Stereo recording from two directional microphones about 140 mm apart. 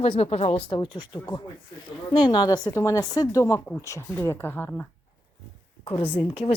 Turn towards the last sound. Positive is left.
turn(degrees=40)  # may be behind; listen again after turning